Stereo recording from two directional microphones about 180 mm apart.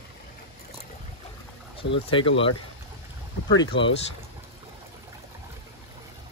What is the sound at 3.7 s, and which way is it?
Speech, 90° left.